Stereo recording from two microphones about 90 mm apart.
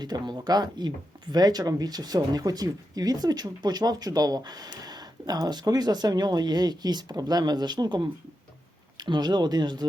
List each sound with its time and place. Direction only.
0.0 s speech: 50° right (ahead or behind)